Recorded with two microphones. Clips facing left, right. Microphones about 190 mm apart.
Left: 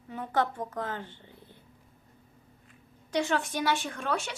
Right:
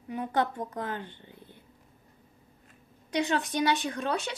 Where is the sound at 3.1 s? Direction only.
20° right (ahead or behind).